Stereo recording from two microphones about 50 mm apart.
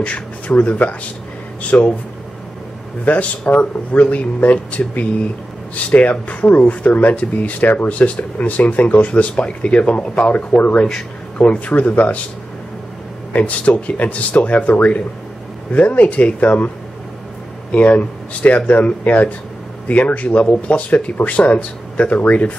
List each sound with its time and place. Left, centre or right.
0.0 s speech: left
3.1 s speech: left
13.3 s speech: left